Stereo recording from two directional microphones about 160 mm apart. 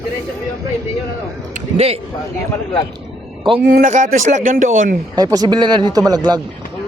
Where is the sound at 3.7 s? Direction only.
55° right (ahead or behind).